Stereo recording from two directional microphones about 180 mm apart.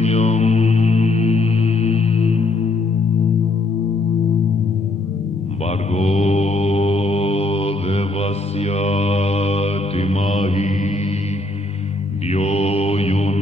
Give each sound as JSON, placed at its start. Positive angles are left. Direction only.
{"t": 0.0, "sound": "mantra", "side_deg": 35}
{"t": 5.9, "sound": "mantra", "side_deg": 35}
{"t": 12.3, "sound": "mantra", "side_deg": 35}